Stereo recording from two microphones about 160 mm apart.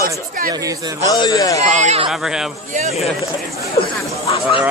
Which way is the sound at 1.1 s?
25° left (ahead or behind).